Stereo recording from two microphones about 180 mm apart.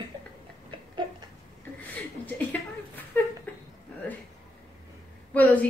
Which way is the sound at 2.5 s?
10° left (ahead or behind).